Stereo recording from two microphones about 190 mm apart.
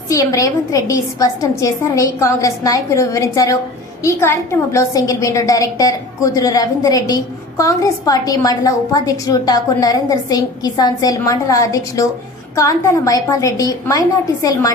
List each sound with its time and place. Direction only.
0.1 s a woman's voice: 15° left (ahead or behind)